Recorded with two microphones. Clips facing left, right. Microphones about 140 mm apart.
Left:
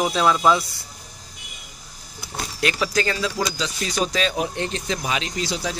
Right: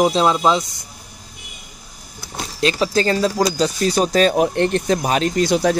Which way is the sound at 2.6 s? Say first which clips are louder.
Right 5 dB; 30° right (ahead or behind).